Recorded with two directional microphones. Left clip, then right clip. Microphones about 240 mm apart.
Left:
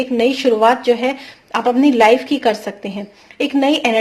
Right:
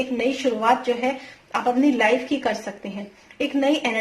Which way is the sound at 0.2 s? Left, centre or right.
Left.